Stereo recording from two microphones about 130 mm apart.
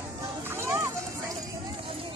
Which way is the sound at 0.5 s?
20° right (ahead or behind).